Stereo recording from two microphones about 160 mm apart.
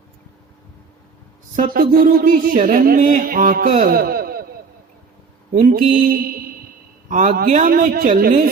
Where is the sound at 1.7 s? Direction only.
65° right (ahead or behind).